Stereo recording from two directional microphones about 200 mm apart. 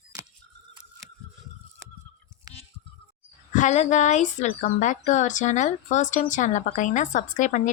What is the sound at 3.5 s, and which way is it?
Speech, 40° left (ahead or behind).